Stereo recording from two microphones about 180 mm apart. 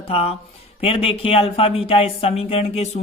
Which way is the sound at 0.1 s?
35° left (ahead or behind).